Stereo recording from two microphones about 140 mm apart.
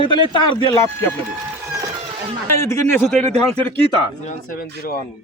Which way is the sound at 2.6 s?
20° left (ahead or behind).